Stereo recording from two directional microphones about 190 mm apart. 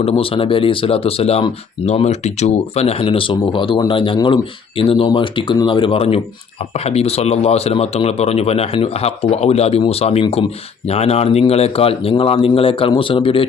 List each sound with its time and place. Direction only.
0.0 s speech: 30° left (ahead or behind)